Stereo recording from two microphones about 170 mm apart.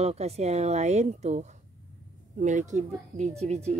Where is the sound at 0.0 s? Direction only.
40° right (ahead or behind).